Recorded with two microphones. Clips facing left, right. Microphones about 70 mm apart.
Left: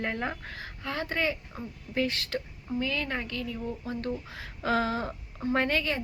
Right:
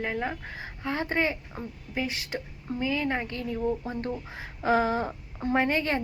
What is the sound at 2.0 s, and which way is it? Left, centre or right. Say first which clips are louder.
A woman's voice: left 2 dB; centre.